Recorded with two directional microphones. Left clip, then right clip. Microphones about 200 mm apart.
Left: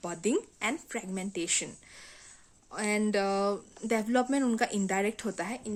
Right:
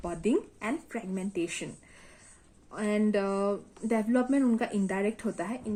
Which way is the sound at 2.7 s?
40° left (ahead or behind).